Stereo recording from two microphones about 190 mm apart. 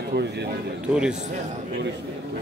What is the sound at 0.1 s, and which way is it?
Speech, 65° right (ahead or behind).